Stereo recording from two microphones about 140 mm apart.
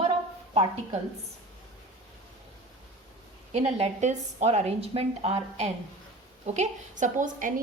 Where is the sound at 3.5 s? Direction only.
50° right (ahead or behind).